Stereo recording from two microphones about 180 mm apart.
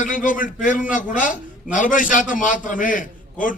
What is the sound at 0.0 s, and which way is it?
A man's voice, 45° left (ahead or behind).